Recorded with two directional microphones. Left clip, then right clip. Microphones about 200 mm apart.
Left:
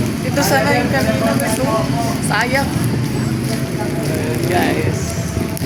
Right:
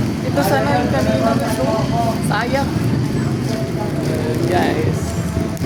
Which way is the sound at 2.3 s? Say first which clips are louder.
Left 5 dB; 5° left (ahead or behind).